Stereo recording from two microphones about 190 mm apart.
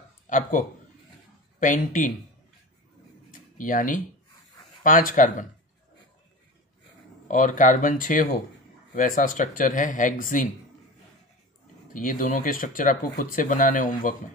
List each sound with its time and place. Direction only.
0.3 s speech: 40° left (ahead or behind)
3.3 s a sound: 45° left (ahead or behind)
4.8 s speech: 45° left (ahead or behind)
7.2 s speech: 40° left (ahead or behind)
11.9 s speech: 45° left (ahead or behind)